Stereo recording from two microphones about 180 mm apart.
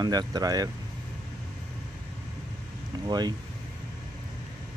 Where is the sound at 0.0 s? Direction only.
20° right (ahead or behind).